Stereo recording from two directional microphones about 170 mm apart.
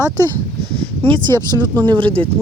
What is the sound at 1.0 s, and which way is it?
Speech, 30° right (ahead or behind).